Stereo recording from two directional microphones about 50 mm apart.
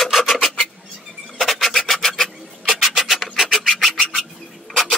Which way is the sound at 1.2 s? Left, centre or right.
Centre.